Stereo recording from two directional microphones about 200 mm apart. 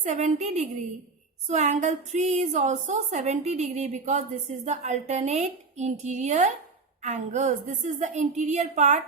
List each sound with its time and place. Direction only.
0.0 s a woman's voice: 35° right (ahead or behind)